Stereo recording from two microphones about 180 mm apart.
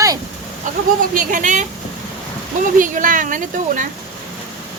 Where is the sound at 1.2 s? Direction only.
45° right (ahead or behind).